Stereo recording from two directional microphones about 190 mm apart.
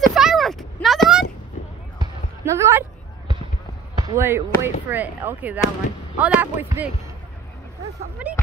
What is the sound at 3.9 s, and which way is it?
Speech, 15° right (ahead or behind).